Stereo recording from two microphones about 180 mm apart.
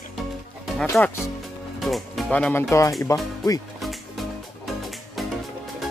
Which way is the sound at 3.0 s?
20° left (ahead or behind).